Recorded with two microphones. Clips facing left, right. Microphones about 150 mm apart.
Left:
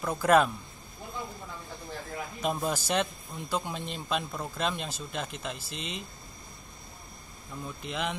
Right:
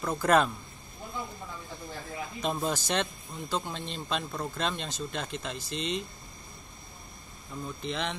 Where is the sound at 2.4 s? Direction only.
5° left (ahead or behind).